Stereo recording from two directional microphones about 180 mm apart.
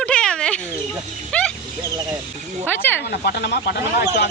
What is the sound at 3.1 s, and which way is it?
Speech, 60° left (ahead or behind).